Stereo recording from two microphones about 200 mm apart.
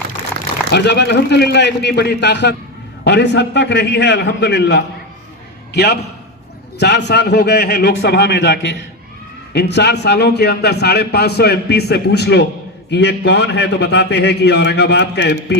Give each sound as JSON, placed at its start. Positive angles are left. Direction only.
{"t": 0.7, "sound": "a man's voice", "side_deg": 60}